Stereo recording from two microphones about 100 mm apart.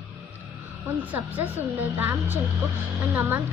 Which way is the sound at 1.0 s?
15° right (ahead or behind).